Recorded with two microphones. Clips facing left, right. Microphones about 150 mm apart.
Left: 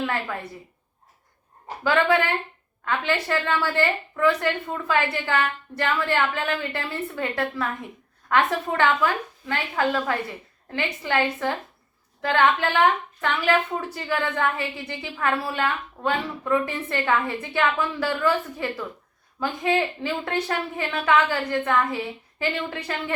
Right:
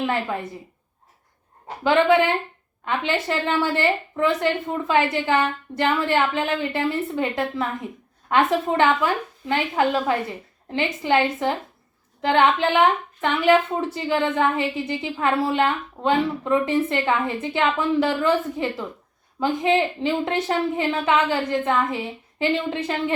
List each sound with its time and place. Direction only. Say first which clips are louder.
0.0 s a woman's voice: right 3 dB; 20° right (ahead or behind)
1.8 s a woman's voice: right 4 dB; 20° right (ahead or behind)